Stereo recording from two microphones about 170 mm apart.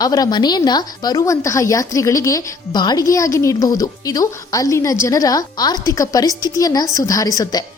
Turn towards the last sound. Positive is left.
turn(degrees=20)  # may be behind; listen again after turning